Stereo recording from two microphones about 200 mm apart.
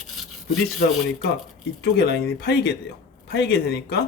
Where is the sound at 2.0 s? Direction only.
55° left (ahead or behind).